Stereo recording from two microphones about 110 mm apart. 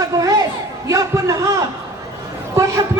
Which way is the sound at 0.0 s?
35° right (ahead or behind).